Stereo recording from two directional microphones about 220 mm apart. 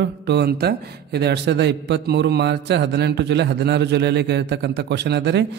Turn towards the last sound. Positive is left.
turn(degrees=-50)  # may be behind; listen again after turning